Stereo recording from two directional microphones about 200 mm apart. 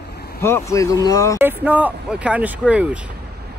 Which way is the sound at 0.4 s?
10° left (ahead or behind).